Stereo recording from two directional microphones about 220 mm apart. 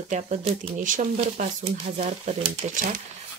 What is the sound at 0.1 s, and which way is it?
Speech, 35° right (ahead or behind).